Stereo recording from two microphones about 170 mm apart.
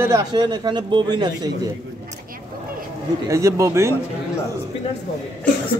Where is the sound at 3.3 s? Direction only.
20° right (ahead or behind).